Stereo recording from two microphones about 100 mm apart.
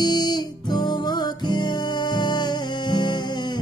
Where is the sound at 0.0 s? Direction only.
45° left (ahead or behind).